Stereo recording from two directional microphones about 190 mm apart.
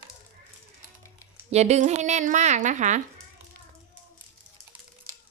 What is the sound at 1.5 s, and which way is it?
A woman's voice, 35° right (ahead or behind).